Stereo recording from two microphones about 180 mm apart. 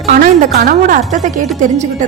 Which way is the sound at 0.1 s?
45° right (ahead or behind).